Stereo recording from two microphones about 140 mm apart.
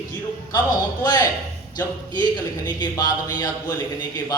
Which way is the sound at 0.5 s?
30° left (ahead or behind).